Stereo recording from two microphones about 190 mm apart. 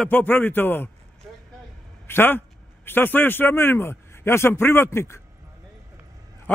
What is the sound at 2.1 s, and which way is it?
Speech, 10° left (ahead or behind).